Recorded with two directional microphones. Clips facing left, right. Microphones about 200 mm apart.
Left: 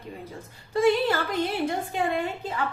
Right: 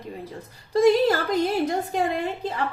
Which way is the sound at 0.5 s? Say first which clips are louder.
Right 4 dB; 40° right (ahead or behind).